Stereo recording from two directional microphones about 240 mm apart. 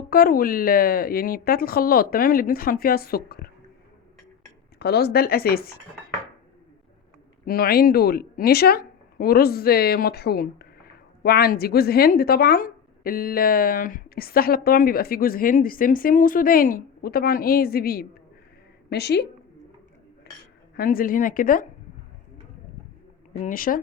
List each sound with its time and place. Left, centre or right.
0.1 s speech: left
4.8 s speech: left
7.4 s a woman's voice: left
20.7 s speech: left
23.4 s speech: left